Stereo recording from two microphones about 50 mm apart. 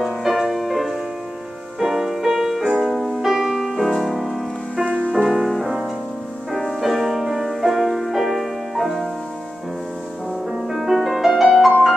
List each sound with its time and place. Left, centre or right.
0.0 s music: centre
4.7 s music: right
5.1 s music: centre
10.5 s music: centre